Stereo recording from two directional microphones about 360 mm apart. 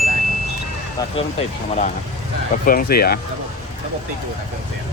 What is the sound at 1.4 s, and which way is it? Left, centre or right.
Speech, centre.